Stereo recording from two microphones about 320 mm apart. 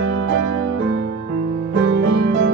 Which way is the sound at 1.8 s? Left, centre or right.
Right.